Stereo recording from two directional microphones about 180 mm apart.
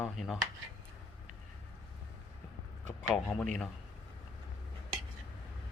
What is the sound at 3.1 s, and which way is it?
Speech, 5° left (ahead or behind).